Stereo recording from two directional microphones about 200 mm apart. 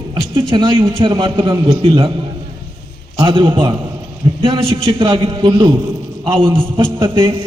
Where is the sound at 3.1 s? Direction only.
25° right (ahead or behind).